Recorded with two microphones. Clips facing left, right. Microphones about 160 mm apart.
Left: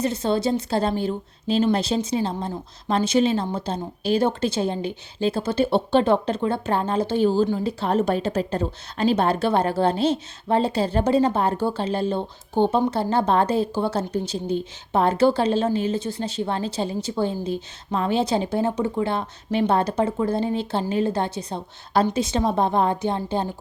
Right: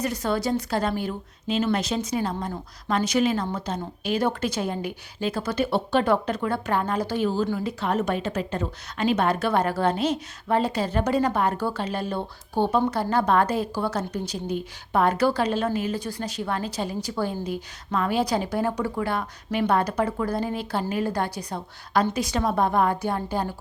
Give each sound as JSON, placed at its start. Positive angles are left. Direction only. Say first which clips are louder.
{"t": 0.0, "sound": "a woman's voice", "louder": "left 3 dB", "side_deg": 25}